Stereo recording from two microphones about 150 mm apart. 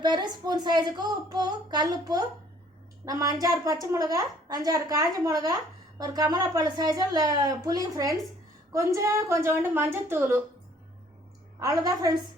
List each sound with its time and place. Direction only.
0.0 s a woman's voice: 30° right (ahead or behind)
11.6 s a woman's voice: 25° right (ahead or behind)